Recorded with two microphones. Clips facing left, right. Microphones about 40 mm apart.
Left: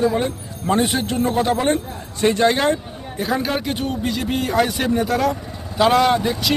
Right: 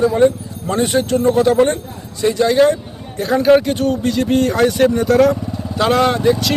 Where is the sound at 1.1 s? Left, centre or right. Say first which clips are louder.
Right 6 dB; centre.